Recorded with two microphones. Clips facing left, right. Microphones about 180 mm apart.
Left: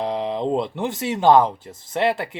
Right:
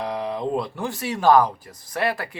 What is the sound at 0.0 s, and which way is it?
Speech, 25° left (ahead or behind).